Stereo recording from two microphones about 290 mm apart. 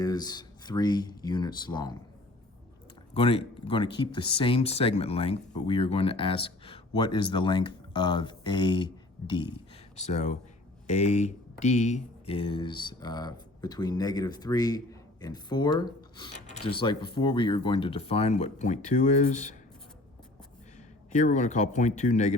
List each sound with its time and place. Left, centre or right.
0.0 s speech: centre
3.2 s speech: centre
21.1 s speech: left